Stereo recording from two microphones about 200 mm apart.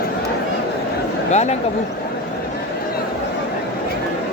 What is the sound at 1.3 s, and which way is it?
Speech, 35° left (ahead or behind).